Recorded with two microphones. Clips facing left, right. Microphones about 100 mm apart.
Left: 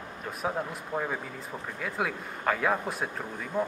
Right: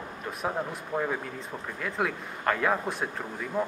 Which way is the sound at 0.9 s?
10° left (ahead or behind).